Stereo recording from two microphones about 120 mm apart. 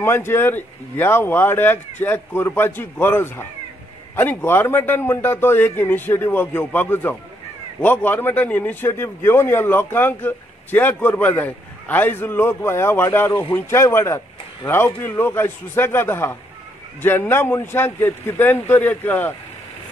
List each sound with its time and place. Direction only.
0.0 s speech: 20° left (ahead or behind)